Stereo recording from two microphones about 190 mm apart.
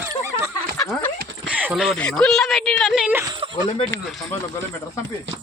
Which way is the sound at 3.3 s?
25° right (ahead or behind).